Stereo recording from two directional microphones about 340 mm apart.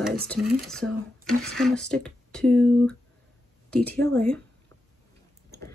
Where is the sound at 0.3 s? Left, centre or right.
Centre.